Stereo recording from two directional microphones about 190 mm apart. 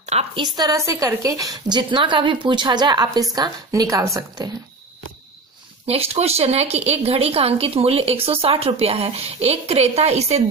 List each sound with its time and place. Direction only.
0.0 s a sound: 35° right (ahead or behind)
0.4 s a woman's voice: 20° right (ahead or behind)
5.9 s speech: 30° right (ahead or behind)